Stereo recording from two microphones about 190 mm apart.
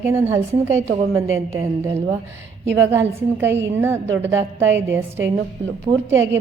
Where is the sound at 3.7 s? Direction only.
10° right (ahead or behind).